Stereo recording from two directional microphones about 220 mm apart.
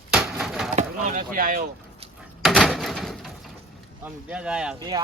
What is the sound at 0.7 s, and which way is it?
Speech, 35° right (ahead or behind).